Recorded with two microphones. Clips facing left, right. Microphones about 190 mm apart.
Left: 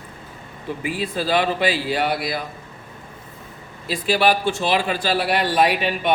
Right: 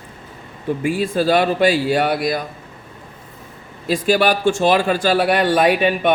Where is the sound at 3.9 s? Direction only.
45° right (ahead or behind).